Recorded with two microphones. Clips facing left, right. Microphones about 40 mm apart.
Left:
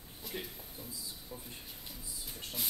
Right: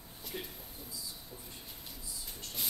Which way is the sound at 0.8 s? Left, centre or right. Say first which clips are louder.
Left 5 dB; centre.